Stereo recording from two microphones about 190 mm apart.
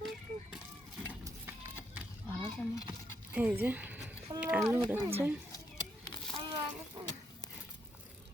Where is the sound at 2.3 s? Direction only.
15° left (ahead or behind).